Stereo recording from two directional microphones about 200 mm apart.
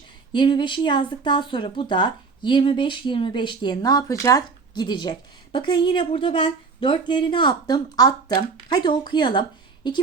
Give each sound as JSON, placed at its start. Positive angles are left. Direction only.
{"t": 0.3, "sound": "speech", "side_deg": 25}